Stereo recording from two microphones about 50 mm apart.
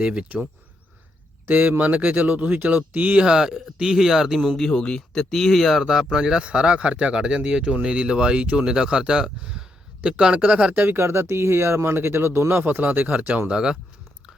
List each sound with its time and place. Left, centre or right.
0.0 s speech: right
1.5 s speech: right
3.2 s speech: centre
4.4 s speech: centre
5.8 s speech: centre
10.4 s speech: right
10.8 s speech: right
12.5 s speech: right
13.5 s speech: centre